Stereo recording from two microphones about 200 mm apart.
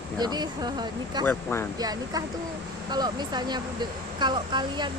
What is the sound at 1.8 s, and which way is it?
Speech, 20° right (ahead or behind).